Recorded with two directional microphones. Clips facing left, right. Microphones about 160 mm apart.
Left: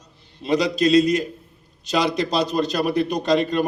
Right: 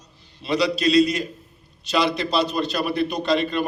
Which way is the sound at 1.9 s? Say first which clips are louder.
Left 1 dB; 40° left (ahead or behind).